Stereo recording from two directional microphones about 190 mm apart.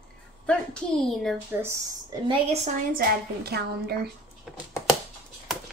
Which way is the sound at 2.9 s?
55° right (ahead or behind).